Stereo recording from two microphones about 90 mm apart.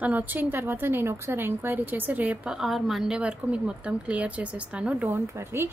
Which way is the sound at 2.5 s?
5° right (ahead or behind).